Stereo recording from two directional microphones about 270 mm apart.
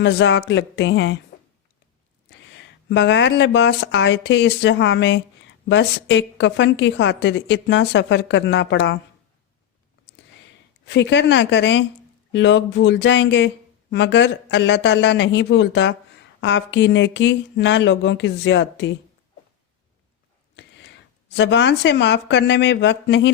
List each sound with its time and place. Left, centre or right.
0.0 s speech: left
2.5 s speech: left
10.8 s speech: left
20.6 s speech: left